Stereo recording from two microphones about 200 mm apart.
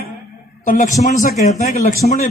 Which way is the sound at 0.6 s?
40° left (ahead or behind).